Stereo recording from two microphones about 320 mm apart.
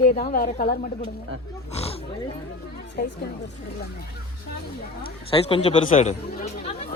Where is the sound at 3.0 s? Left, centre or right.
Left.